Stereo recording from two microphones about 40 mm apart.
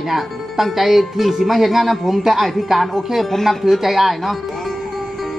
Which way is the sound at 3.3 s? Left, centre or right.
Centre.